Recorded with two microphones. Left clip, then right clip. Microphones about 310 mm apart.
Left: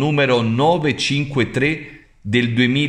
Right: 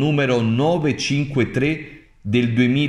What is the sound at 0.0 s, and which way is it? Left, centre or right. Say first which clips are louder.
Speech: left 3 dB; centre.